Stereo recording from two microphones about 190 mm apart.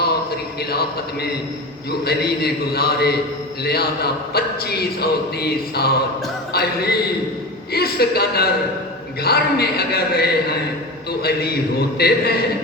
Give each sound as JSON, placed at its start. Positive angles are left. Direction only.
{"t": 0.7, "sound": "a man's voice", "side_deg": 55}
{"t": 6.5, "sound": "a sound", "side_deg": 55}
{"t": 7.7, "sound": "a man's voice", "side_deg": 55}